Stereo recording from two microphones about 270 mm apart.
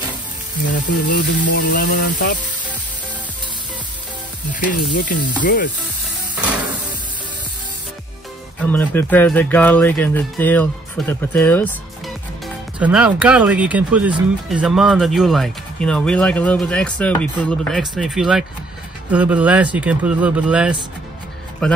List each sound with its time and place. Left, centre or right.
1.1 s a sound: left
4.5 s sizzle: left
8.6 s speech: centre
12.7 s speech: centre